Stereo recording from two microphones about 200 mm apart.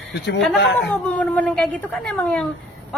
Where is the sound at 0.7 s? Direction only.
5° left (ahead or behind).